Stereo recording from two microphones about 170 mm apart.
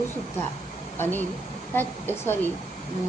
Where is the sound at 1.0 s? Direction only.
10° left (ahead or behind).